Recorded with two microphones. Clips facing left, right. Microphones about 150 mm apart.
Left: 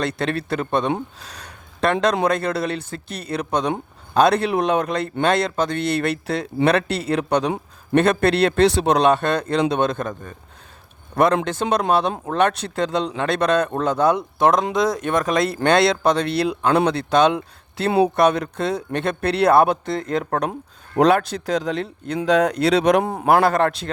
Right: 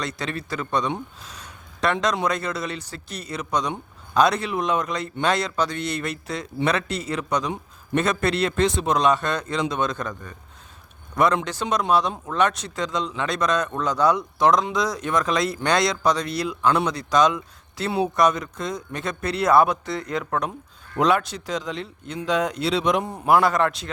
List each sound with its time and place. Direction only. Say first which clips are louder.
0.0 s speech: left 6 dB; 60° left (ahead or behind)
1.9 s speech: left 5 dB; 55° left (ahead or behind)
20.9 s speech: left 5 dB; 35° left (ahead or behind)
22.4 s speech: left 6 dB; 60° left (ahead or behind)